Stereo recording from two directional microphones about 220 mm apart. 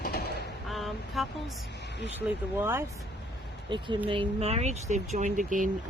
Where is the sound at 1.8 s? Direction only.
50° left (ahead or behind).